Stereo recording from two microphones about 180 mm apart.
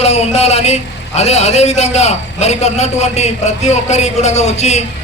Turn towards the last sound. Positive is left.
turn(degrees=40)  # may be behind; listen again after turning